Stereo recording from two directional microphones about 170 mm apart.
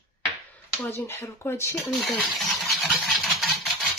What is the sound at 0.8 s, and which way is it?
Speech, 15° left (ahead or behind).